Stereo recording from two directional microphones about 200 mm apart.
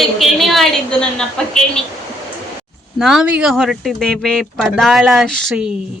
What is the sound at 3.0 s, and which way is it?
Speech, centre (ahead or behind).